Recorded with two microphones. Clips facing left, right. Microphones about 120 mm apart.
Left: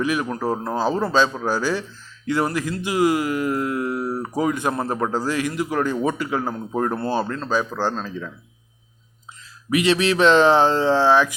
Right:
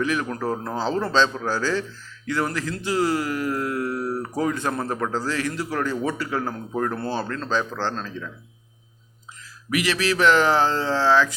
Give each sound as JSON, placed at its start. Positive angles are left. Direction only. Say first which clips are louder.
{"t": 0.0, "sound": "speech", "louder": "left 2 dB", "side_deg": 15}
{"t": 9.6, "sound": "speech", "louder": "left 4 dB", "side_deg": 25}